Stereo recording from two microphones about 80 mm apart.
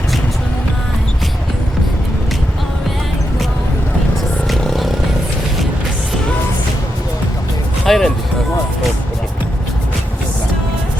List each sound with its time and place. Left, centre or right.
4.4 s vehicle: centre
7.9 s music: centre